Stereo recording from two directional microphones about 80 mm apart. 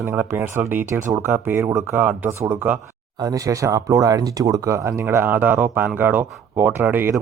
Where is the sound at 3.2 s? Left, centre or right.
Right.